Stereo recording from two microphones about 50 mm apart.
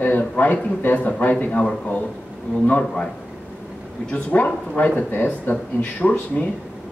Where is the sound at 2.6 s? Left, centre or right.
Left.